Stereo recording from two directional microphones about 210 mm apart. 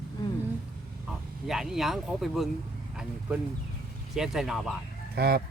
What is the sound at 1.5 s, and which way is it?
Speech, centre (ahead or behind).